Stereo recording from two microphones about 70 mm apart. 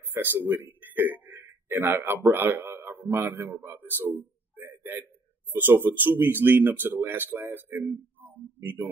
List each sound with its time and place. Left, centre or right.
0.1 s speech: right
0.5 s a man's voice: right
4.1 s a sound: right
5.5 s speech: right